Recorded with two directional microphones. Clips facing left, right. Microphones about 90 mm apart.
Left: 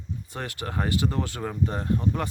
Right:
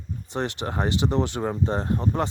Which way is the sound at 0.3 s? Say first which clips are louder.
Right 7 dB; 25° right (ahead or behind).